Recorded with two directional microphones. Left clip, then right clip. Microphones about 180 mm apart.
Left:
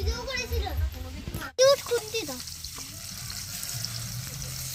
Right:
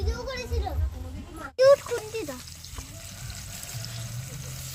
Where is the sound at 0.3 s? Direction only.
5° right (ahead or behind).